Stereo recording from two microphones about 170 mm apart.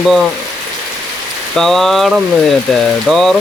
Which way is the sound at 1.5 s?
Centre (ahead or behind).